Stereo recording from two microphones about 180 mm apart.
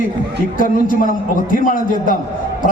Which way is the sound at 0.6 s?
50° left (ahead or behind).